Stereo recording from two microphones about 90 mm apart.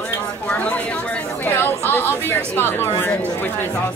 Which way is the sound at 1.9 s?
25° left (ahead or behind).